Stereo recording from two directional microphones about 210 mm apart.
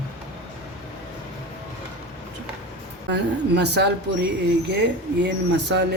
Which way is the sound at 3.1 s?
55° right (ahead or behind).